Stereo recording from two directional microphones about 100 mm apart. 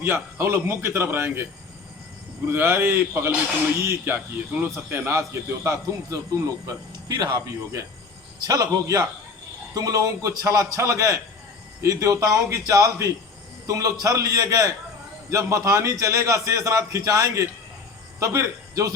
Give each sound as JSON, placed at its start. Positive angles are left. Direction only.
{"t": 0.0, "sound": "a man's voice", "side_deg": -25}
{"t": 2.5, "sound": "a man's voice", "side_deg": -25}